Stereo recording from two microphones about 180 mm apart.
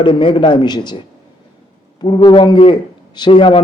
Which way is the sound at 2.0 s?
25° left (ahead or behind).